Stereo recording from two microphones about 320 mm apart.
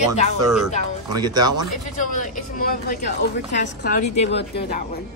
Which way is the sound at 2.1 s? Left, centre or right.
Left.